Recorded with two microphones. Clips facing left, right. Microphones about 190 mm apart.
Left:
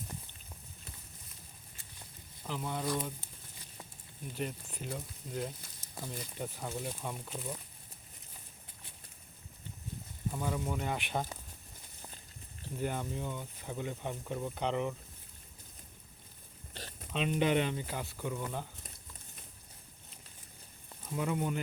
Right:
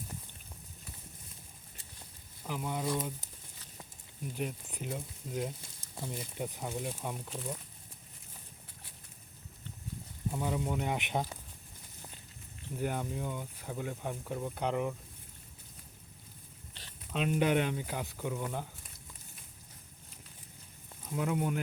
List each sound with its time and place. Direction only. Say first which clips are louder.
2.5 s speech: right 1 dB; 10° right (ahead or behind)
4.4 s speech: even; 10° right (ahead or behind)
10.3 s speech: right 2 dB; 15° right (ahead or behind)
12.7 s speech: right 1 dB; 10° right (ahead or behind)
16.7 s a sound: left 10 dB; 45° left (ahead or behind)
17.1 s speech: right 1 dB; 5° right (ahead or behind)
21.1 s speech: right 1 dB; 5° right (ahead or behind)